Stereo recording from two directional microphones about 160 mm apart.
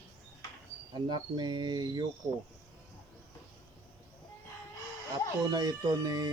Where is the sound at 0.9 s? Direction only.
30° right (ahead or behind).